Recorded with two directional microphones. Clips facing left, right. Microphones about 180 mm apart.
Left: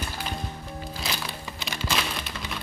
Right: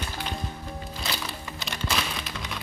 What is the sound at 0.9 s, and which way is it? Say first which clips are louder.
Music: even; centre (ahead or behind).